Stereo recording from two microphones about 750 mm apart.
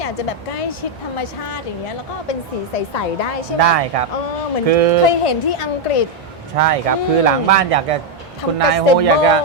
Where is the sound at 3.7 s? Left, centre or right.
Right.